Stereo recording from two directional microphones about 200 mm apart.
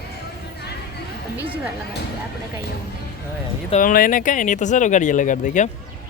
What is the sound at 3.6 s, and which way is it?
Speech, 40° left (ahead or behind).